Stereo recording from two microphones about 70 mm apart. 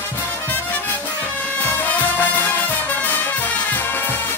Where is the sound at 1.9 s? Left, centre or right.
Left.